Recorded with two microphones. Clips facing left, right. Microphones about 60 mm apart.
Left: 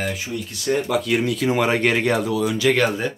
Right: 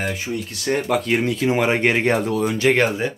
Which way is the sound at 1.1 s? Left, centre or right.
Right.